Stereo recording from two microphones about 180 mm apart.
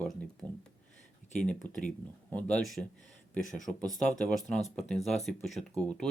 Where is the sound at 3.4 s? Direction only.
45° left (ahead or behind).